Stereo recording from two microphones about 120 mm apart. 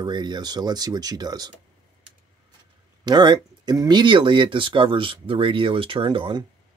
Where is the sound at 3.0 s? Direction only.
35° right (ahead or behind).